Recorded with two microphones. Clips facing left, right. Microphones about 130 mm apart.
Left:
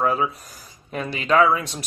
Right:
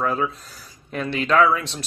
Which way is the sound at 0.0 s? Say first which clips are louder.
Left 1 dB; 5° left (ahead or behind).